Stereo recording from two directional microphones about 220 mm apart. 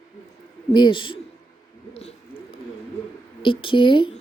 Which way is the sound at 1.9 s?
30° left (ahead or behind).